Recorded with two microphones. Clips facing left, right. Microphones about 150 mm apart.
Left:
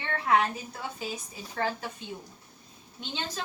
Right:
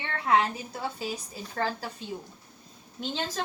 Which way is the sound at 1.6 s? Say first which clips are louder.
Even; 35° right (ahead or behind).